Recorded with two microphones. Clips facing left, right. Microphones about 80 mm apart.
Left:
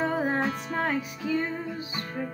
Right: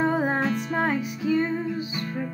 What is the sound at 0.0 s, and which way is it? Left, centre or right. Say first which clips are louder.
Music: right 3 dB; right.